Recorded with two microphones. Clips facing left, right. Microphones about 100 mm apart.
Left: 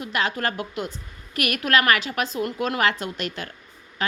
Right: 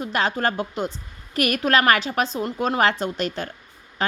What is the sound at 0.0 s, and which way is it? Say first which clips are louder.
A woman's voice: right 3 dB; 30° right (ahead or behind).